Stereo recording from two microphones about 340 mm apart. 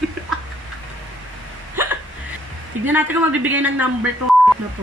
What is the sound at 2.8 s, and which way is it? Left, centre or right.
A woman's voice, centre.